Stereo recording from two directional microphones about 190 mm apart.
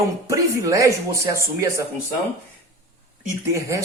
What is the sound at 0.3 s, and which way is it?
Speech, 15° right (ahead or behind).